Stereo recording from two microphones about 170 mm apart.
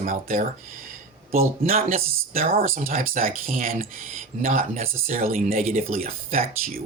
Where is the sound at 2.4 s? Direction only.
60° right (ahead or behind); by 5.8 s 40° right (ahead or behind).